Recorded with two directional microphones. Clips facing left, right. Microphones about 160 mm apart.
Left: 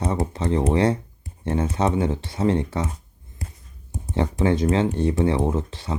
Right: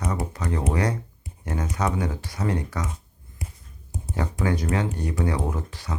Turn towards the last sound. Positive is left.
turn(degrees=25)  # may be behind; listen again after turning